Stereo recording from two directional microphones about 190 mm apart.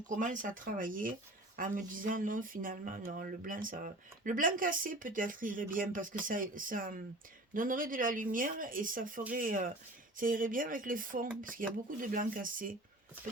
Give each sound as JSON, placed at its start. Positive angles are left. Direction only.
{"t": 0.1, "sound": "speech", "side_deg": -45}